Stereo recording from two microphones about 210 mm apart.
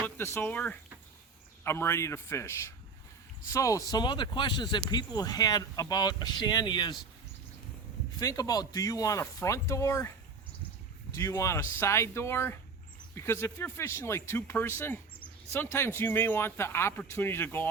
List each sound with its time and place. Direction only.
0.0 s a man's voice: 10° left (ahead or behind)
8.2 s a man's voice: 15° left (ahead or behind)
11.2 s a man's voice: 15° left (ahead or behind)